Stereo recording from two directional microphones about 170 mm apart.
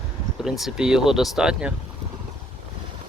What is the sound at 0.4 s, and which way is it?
Speech, centre (ahead or behind).